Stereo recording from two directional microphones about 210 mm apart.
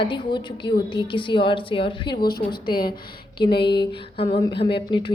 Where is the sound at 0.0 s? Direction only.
20° left (ahead or behind).